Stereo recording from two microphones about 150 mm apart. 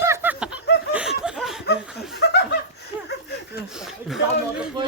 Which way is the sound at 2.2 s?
90° left.